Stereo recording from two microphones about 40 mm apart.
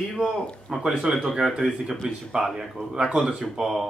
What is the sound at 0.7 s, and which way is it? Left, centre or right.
Speech, centre.